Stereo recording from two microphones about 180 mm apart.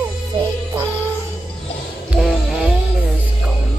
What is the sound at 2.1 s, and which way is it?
Music, 5° right (ahead or behind).